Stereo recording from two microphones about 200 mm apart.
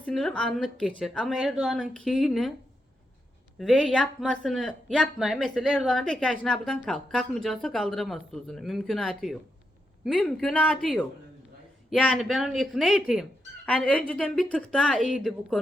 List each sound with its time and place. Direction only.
0.0 s speech: centre (ahead or behind)
3.6 s speech: centre (ahead or behind)